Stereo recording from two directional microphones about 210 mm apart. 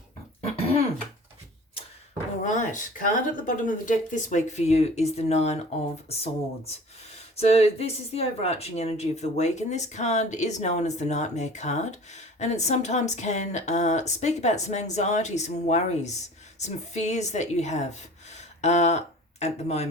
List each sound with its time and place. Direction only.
2.4 s speech: 35° left (ahead or behind)